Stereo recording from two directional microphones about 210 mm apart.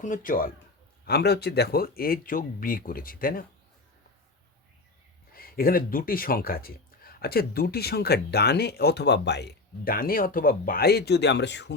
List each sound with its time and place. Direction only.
0.0 s speech: 40° left (ahead or behind)
5.3 s speech: 45° left (ahead or behind)